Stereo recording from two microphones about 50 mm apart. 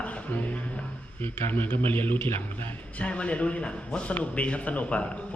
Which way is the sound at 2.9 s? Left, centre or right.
Left.